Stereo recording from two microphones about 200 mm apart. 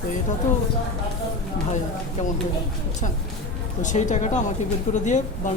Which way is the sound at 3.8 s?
40° left (ahead or behind).